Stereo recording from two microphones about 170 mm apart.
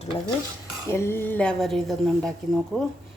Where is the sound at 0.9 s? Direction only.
15° left (ahead or behind).